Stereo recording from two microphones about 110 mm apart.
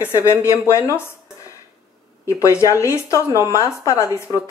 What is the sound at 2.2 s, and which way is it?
Speech, 30° left (ahead or behind).